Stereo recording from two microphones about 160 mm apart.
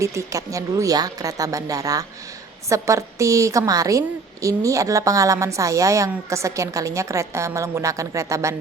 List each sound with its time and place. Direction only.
0.0 s a woman's voice: 20° right (ahead or behind)